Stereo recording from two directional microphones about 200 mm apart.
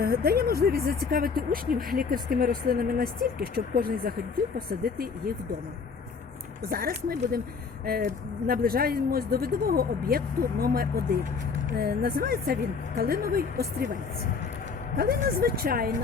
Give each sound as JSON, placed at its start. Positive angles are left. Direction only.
{"t": 0.0, "sound": "speech", "side_deg": -50}
{"t": 6.7, "sound": "speech", "side_deg": -50}
{"t": 14.9, "sound": "speech", "side_deg": -50}